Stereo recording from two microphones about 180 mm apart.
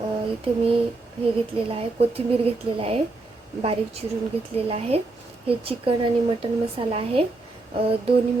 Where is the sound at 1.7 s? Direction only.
35° right (ahead or behind).